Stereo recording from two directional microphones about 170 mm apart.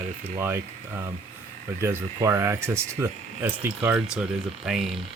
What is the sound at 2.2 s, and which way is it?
Speech, 15° right (ahead or behind).